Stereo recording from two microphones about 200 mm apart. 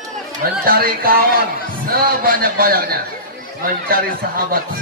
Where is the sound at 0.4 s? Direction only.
45° right (ahead or behind).